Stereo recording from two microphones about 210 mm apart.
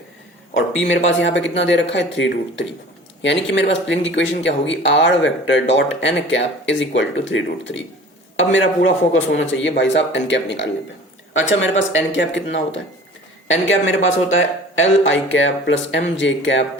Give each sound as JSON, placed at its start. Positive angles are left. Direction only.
{"t": 0.5, "sound": "speech", "side_deg": 65}